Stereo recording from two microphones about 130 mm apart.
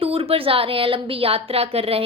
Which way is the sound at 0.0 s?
45° right (ahead or behind).